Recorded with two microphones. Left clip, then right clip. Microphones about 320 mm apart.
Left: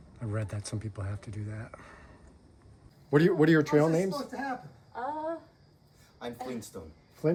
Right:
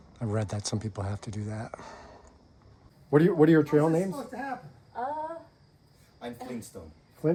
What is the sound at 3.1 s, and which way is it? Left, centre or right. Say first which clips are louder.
Speech: right 2 dB; centre.